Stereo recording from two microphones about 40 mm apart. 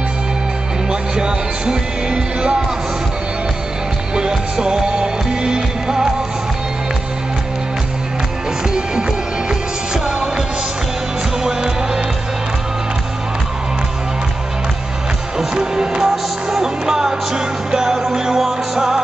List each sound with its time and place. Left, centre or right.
1.1 s music: centre
4.1 s music: centre
10.0 s music: centre
11.4 s music: centre
15.3 s music: centre